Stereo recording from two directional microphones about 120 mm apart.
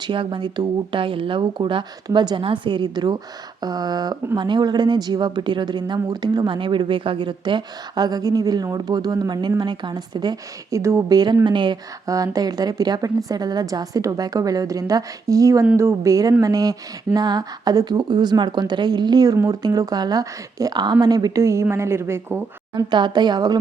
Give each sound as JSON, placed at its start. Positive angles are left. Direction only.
{"t": 0.0, "sound": "a woman's voice", "side_deg": -40}
{"t": 10.8, "sound": "a woman's voice", "side_deg": -25}
{"t": 11.4, "sound": "a woman's voice", "side_deg": -40}
{"t": 12.0, "sound": "a woman's voice", "side_deg": -30}
{"t": 22.7, "sound": "a woman's voice", "side_deg": -40}